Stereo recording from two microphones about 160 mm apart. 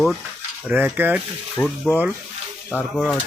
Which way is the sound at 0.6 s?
10° right (ahead or behind).